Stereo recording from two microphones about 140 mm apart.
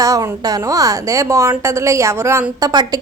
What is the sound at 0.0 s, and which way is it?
A woman's voice, 25° right (ahead or behind).